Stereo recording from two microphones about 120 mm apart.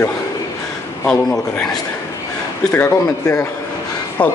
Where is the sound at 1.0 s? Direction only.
5° left (ahead or behind).